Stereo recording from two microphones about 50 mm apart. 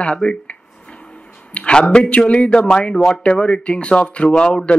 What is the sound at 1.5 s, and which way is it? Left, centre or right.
Speech, left.